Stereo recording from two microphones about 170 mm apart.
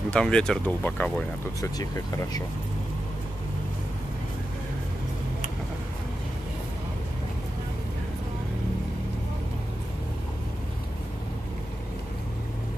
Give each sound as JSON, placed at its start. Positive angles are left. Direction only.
{"t": 0.1, "sound": "speech", "side_deg": 5}
{"t": 1.6, "sound": "speech", "side_deg": 20}